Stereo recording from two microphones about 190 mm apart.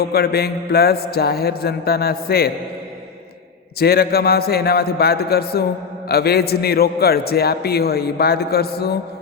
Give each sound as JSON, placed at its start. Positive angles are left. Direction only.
{"t": 0.0, "sound": "a man's voice", "side_deg": 55}
{"t": 3.8, "sound": "a man's voice", "side_deg": 55}